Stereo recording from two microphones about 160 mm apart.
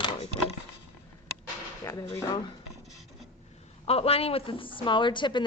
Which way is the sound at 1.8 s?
20° left (ahead or behind).